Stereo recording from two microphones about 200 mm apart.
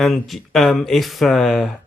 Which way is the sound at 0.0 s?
Centre (ahead or behind).